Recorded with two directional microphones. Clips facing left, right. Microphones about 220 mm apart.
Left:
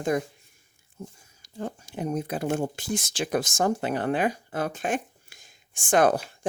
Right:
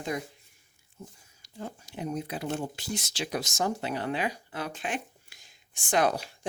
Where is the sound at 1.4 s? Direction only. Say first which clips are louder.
Left 6 dB; 50° left (ahead or behind).